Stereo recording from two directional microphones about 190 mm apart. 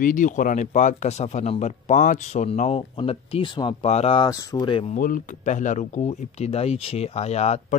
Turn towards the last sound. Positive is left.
turn(degrees=35)  # may be behind; listen again after turning